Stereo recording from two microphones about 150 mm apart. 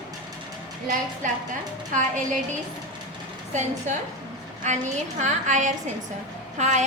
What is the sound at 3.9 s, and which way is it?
A woman's voice, 55° right (ahead or behind).